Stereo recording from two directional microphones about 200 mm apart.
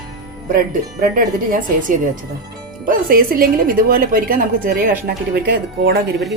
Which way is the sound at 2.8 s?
45° right (ahead or behind).